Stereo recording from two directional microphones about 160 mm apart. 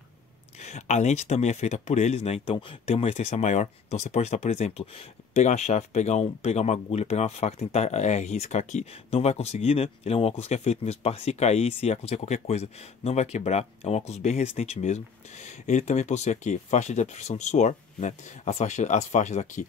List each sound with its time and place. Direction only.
0.6 s speech: 45° left (ahead or behind)